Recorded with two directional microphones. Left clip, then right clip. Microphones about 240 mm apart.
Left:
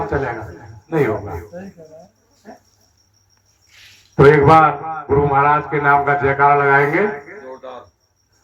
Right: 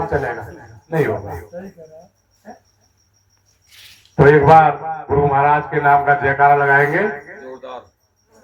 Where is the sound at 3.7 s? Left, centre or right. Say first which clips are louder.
Right 2 dB; right.